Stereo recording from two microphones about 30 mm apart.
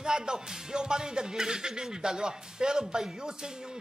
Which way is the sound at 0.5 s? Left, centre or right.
Right.